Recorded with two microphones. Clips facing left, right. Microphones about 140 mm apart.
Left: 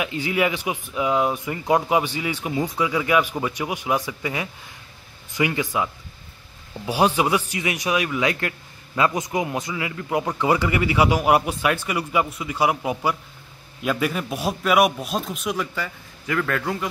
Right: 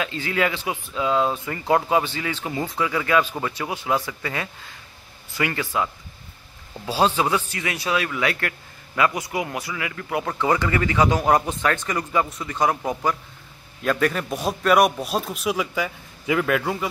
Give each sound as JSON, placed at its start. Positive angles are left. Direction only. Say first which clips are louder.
{"t": 0.0, "sound": "a man's voice", "louder": "left 1 dB", "side_deg": 15}
{"t": 6.9, "sound": "a man's voice", "louder": "left 1 dB", "side_deg": 15}